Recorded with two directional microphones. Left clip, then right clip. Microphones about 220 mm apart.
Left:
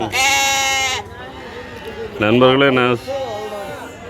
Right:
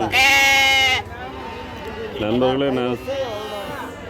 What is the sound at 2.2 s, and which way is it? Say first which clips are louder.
Speech: left 7 dB; 15° left (ahead or behind).